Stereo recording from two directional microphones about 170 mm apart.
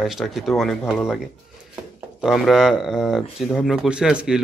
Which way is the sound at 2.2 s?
Centre (ahead or behind).